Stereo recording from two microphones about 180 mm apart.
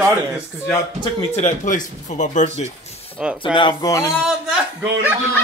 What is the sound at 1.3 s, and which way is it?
Speech, 40° left (ahead or behind).